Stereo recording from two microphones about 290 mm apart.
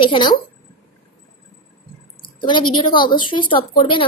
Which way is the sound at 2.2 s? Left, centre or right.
Centre.